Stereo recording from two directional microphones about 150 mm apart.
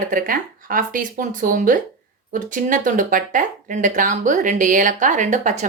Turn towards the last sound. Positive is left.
turn(degrees=-55)  # may be behind; listen again after turning